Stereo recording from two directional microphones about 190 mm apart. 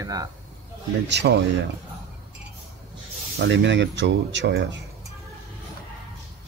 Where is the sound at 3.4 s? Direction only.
70° right (ahead or behind).